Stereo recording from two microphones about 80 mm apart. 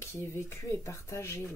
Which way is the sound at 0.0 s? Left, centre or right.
Left.